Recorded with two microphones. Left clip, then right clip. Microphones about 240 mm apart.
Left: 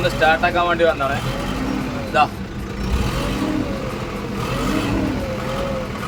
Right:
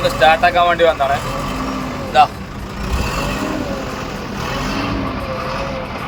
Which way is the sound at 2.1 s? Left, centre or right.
Centre.